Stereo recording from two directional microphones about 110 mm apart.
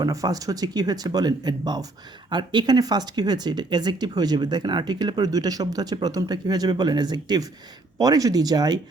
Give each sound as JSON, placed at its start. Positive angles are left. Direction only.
{"t": 0.0, "sound": "speech", "side_deg": -35}